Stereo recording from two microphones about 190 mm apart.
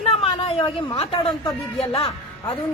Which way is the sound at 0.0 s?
30° left (ahead or behind).